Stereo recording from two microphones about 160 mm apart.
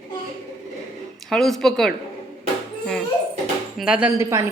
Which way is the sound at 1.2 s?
Centre (ahead or behind).